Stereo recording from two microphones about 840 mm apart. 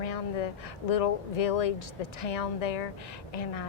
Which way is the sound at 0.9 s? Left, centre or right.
Left.